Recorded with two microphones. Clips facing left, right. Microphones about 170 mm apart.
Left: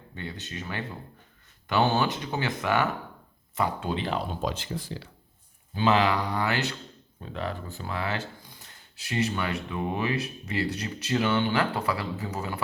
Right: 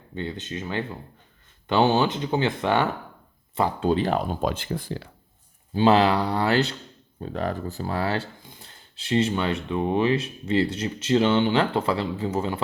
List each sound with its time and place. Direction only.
0.1 s speech: 20° right (ahead or behind); by 5.0 s 55° right (ahead or behind)
5.7 s speech: 35° right (ahead or behind)
7.2 s speech: 45° right (ahead or behind)
8.4 s a sound: 25° right (ahead or behind)
9.6 s speech: 20° right (ahead or behind)